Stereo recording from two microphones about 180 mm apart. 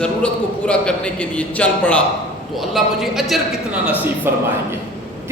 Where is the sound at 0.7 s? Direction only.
5° left (ahead or behind).